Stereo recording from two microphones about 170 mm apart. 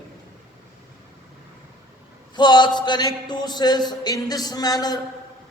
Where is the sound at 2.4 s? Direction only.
25° left (ahead or behind).